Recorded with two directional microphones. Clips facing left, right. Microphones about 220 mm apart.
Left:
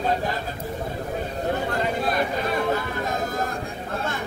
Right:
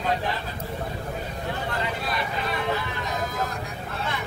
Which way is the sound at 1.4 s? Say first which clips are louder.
Left 5 dB; 45° left (ahead or behind).